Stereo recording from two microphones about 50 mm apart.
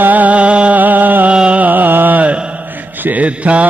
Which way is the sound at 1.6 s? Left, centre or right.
Right.